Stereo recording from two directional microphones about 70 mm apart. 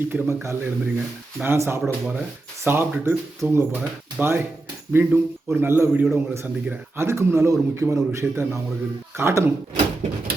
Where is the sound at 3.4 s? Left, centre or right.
Right.